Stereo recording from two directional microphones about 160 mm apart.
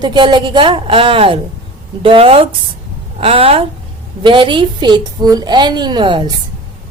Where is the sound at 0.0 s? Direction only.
25° right (ahead or behind).